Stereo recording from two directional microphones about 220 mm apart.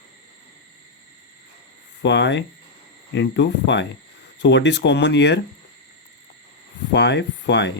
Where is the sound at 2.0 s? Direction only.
50° left (ahead or behind).